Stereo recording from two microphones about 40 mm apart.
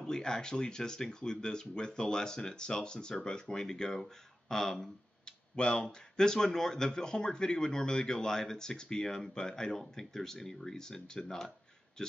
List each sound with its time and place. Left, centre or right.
0.0 s speech: centre
5.2 s speech: left